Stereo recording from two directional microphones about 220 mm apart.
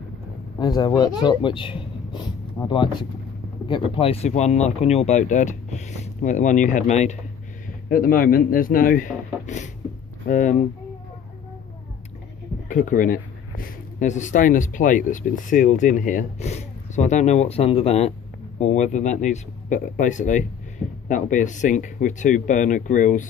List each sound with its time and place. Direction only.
0.6 s speech: 20° left (ahead or behind); by 10.6 s 35° left (ahead or behind)
12.6 s speech: 40° left (ahead or behind)